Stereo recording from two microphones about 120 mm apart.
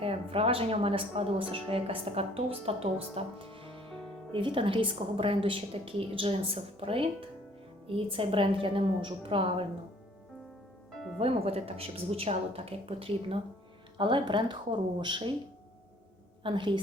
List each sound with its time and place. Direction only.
0.0 s a woman's voice: 55° right (ahead or behind)
10.9 s music: centre (ahead or behind)
11.2 s a woman's voice: 55° right (ahead or behind)
16.4 s a woman's voice: 45° right (ahead or behind)